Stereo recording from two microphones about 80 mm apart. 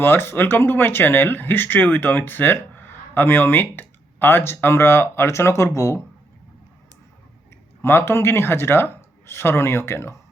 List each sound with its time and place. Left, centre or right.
0.0 s speech: left
7.8 s speech: left